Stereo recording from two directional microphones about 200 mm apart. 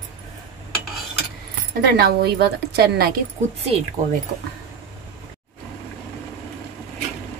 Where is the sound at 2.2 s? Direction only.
55° right (ahead or behind).